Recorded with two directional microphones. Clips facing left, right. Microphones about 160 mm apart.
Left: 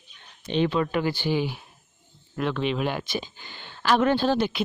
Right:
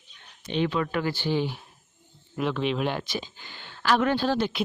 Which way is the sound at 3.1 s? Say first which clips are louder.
Left 2 dB; 15° left (ahead or behind).